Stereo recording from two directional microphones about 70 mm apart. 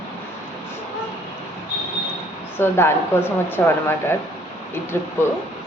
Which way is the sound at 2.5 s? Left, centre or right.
Left.